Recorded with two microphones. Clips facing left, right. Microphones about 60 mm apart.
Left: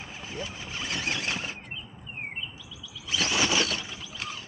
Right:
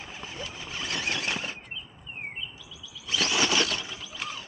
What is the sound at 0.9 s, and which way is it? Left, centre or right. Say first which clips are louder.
Squeal: right 1 dB; centre.